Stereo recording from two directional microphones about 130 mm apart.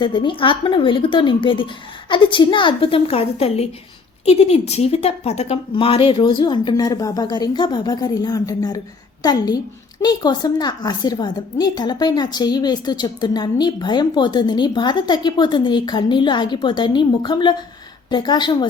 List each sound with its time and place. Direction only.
0.0 s a woman's voice: 40° left (ahead or behind)